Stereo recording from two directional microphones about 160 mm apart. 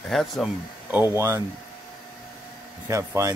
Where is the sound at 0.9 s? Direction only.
15° right (ahead or behind).